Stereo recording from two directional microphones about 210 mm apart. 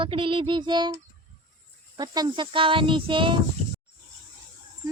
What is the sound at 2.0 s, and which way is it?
Speech, 20° right (ahead or behind).